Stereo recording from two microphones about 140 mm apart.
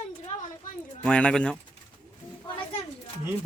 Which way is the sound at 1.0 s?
5° left (ahead or behind).